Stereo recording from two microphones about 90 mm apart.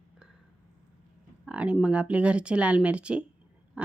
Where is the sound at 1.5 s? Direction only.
15° right (ahead or behind).